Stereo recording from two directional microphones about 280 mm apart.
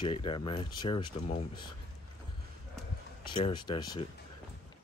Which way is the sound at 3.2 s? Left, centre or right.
Centre.